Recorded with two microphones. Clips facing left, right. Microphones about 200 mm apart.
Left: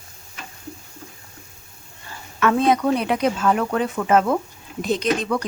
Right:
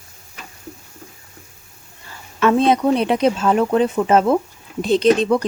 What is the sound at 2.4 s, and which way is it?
Speech, 25° right (ahead or behind).